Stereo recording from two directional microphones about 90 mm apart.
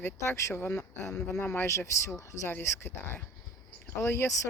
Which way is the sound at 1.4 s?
20° left (ahead or behind).